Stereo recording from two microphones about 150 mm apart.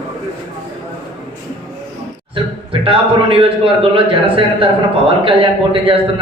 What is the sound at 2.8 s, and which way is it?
A man's voice, 35° right (ahead or behind).